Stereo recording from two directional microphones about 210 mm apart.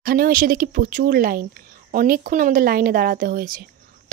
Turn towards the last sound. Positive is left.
turn(degrees=-40)  # may be behind; listen again after turning